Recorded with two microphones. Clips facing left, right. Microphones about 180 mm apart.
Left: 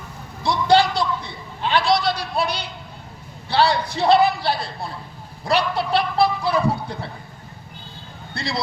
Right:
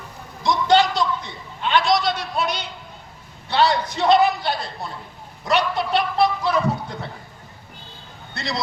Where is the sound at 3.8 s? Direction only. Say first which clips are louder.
Even; 30° left (ahead or behind).